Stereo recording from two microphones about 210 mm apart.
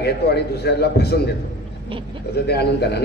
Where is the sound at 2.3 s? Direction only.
50° left (ahead or behind).